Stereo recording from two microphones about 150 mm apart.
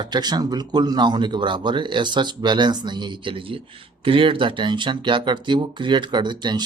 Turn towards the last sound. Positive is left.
turn(degrees=-30)  # may be behind; listen again after turning